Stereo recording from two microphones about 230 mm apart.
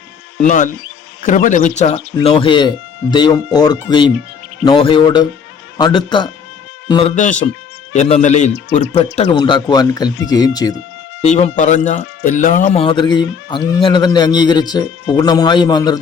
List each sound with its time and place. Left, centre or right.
0.4 s a man's voice: left
7.2 s speech: left; by 10.8 s centre
11.2 s speech: left